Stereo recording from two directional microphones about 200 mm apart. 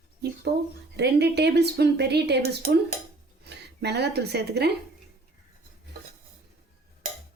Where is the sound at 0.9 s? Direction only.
55° right (ahead or behind).